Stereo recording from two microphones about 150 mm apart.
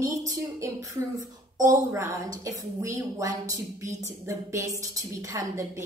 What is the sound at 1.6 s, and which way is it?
A woman's voice, 20° right (ahead or behind).